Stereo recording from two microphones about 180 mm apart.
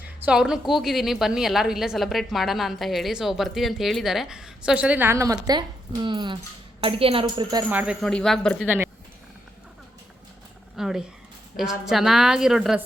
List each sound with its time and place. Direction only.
0.3 s a woman's voice: 5° right (ahead or behind); by 7.6 s 30° right (ahead or behind)
7.7 s speech: 10° right (ahead or behind)
8.0 s a woman's voice: centre (ahead or behind)
10.8 s a woman's voice: 5° right (ahead or behind)